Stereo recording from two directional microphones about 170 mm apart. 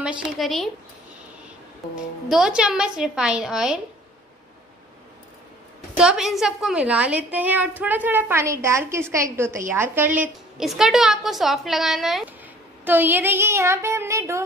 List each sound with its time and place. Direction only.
0.0 s a woman's voice: 5° right (ahead or behind)
2.2 s a woman's voice: 5° right (ahead or behind)
5.9 s a woman's voice: 5° right (ahead or behind)